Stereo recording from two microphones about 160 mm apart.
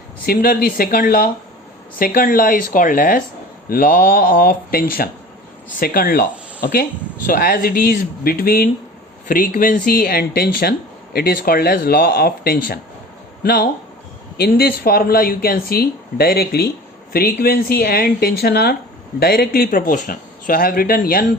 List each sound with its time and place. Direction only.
0.3 s speech: 70° left (ahead or behind)